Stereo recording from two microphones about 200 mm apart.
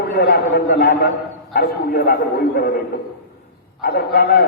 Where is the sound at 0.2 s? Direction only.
55° left (ahead or behind).